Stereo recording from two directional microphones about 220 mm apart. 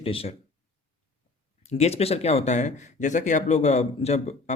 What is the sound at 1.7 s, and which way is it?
Speech, 30° left (ahead or behind).